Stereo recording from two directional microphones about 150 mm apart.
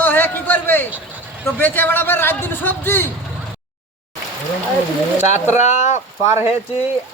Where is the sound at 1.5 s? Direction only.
15° left (ahead or behind).